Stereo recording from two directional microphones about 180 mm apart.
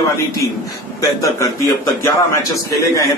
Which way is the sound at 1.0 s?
20° left (ahead or behind).